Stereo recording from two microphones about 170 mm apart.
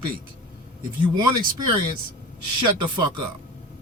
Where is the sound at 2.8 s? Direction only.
25° right (ahead or behind).